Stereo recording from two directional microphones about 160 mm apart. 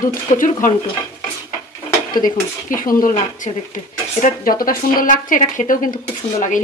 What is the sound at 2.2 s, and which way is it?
Speech, 60° left (ahead or behind).